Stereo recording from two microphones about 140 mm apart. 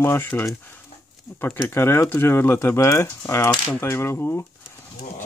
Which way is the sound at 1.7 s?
15° left (ahead or behind).